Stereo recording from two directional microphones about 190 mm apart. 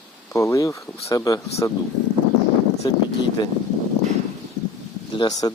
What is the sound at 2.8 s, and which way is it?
Speech, 25° left (ahead or behind).